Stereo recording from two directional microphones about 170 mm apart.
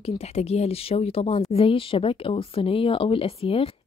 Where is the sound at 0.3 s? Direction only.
40° left (ahead or behind).